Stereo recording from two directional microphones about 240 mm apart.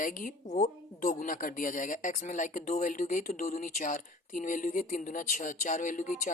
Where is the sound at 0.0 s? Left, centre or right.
Left.